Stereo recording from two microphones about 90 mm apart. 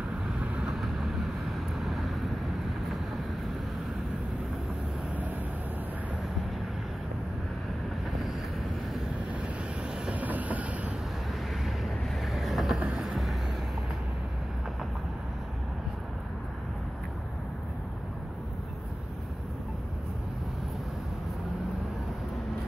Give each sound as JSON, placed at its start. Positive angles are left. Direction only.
{"t": 0.4, "sound": "vehicle", "side_deg": -10}
{"t": 10.0, "sound": "train", "side_deg": -15}
{"t": 11.6, "sound": "vehicle", "side_deg": 0}